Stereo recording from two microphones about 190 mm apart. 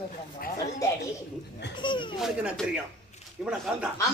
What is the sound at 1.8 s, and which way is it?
Speech, 25° left (ahead or behind).